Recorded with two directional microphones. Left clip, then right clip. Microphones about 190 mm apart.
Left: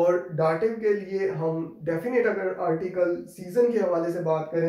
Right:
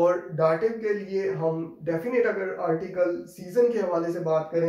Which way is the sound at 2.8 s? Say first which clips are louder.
Even; 5° left (ahead or behind).